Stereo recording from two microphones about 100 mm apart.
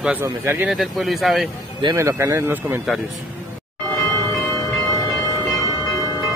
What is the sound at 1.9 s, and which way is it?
Speech, 30° right (ahead or behind).